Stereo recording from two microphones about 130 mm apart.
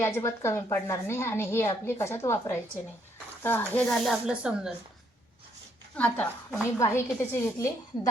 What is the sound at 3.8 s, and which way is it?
Speech, centre (ahead or behind).